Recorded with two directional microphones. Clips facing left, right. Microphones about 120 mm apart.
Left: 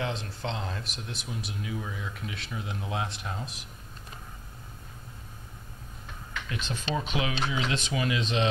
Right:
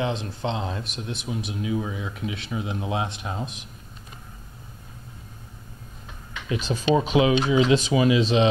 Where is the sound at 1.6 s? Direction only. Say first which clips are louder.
Right 10 dB; 15° right (ahead or behind).